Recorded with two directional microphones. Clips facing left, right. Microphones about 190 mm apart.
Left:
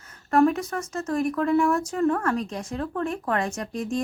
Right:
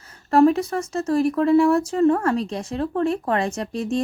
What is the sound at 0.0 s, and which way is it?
Speech, 30° right (ahead or behind).